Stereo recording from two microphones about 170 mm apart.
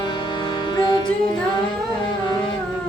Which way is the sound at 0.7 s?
25° left (ahead or behind).